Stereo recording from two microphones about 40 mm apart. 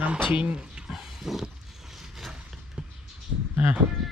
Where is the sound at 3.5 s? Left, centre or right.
Right.